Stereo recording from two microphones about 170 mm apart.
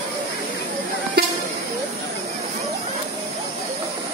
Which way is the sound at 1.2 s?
70° right (ahead or behind).